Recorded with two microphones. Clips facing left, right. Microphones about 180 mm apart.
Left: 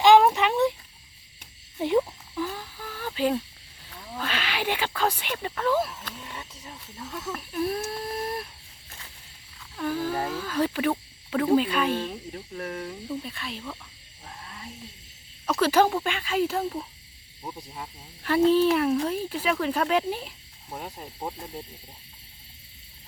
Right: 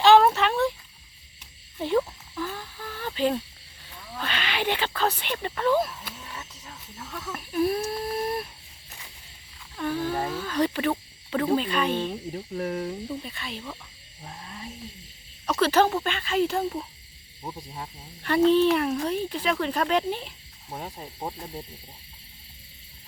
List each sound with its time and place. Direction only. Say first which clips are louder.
0.0 s a sound: even; 10° left (ahead or behind)
1.8 s a sound: left 1 dB; 15° left (ahead or behind)
4.2 s speech: right 1 dB; 5° left (ahead or behind)
6.3 s a sound: left 1 dB; 15° left (ahead or behind)
7.3 s whimper: right 4 dB; 5° right (ahead or behind)
9.7 s speech: even; 5° left (ahead or behind)
12.3 s speech: right 5 dB; 30° right (ahead or behind)
13.1 s speech: left 1 dB; centre (ahead or behind)
15.4 s speech: even; 10° left (ahead or behind)